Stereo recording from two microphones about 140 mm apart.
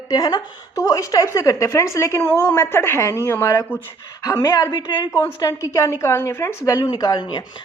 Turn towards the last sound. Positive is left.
turn(degrees=30)  # may be behind; listen again after turning